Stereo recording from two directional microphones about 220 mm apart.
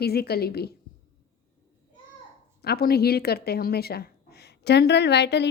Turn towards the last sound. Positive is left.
turn(degrees=50)  # may be behind; listen again after turning